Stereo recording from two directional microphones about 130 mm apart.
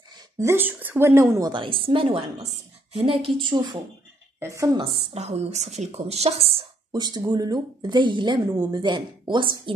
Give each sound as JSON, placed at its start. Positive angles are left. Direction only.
{"t": 0.4, "sound": "speech", "side_deg": -20}
{"t": 1.5, "sound": "a woman's voice", "side_deg": -40}
{"t": 4.4, "sound": "speech", "side_deg": -25}
{"t": 4.7, "sound": "a woman's voice", "side_deg": -45}
{"t": 6.9, "sound": "a woman's voice", "side_deg": -35}